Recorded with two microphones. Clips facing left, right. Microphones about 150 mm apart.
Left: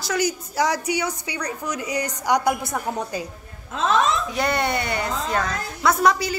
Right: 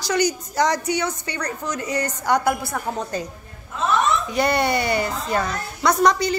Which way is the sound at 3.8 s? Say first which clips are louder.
Even; 90° left.